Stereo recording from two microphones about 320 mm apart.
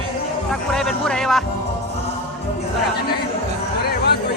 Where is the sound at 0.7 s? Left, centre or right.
Centre.